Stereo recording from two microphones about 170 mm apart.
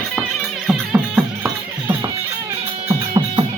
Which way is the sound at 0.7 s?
5° right (ahead or behind).